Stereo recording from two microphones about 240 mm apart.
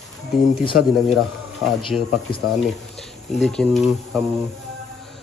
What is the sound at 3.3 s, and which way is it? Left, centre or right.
Speech, centre.